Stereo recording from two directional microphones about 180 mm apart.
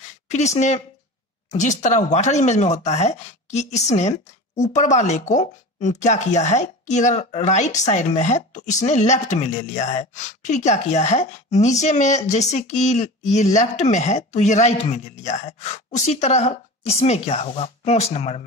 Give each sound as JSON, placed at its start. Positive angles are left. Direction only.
{"t": 0.3, "sound": "speech", "side_deg": 40}